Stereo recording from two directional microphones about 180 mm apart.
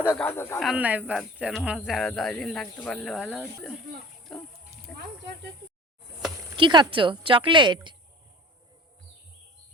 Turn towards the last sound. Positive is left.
turn(degrees=-25)  # may be behind; listen again after turning